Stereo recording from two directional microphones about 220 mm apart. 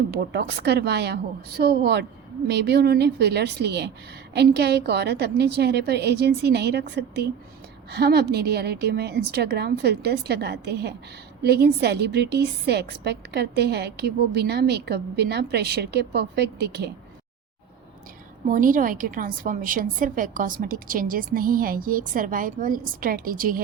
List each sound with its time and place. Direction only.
0.2 s a woman's voice: 50° right (ahead or behind)
18.5 s a woman's voice: 35° right (ahead or behind)